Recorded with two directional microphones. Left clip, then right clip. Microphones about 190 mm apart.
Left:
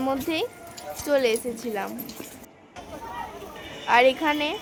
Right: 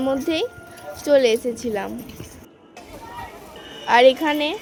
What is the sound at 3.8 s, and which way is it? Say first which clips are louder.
Speech: right 5 dB; 20° right (ahead or behind).